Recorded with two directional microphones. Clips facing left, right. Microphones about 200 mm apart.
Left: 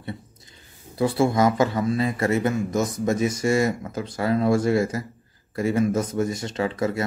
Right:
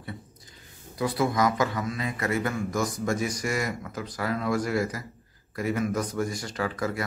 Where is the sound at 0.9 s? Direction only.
30° left (ahead or behind).